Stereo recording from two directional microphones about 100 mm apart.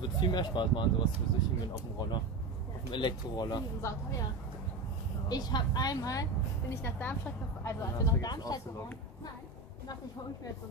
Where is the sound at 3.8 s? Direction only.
30° left (ahead or behind).